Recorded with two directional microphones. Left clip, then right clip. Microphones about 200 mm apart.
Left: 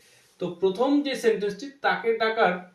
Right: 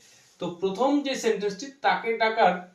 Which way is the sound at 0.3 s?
20° left (ahead or behind).